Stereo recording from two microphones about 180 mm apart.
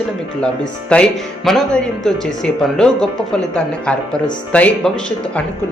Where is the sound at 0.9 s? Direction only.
5° left (ahead or behind).